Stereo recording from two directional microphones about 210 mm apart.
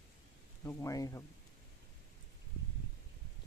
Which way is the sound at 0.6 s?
15° left (ahead or behind).